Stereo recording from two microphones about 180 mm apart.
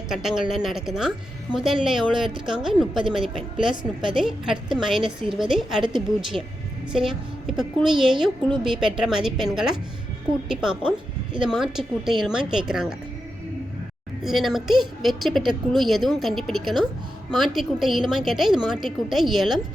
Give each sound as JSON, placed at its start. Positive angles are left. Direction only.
{"t": 0.1, "sound": "a woman's voice", "side_deg": 0}
{"t": 14.2, "sound": "a woman's voice", "side_deg": 0}